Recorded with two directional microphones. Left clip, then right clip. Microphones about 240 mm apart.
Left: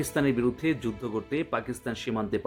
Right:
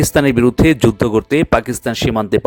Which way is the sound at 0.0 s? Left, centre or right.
Right.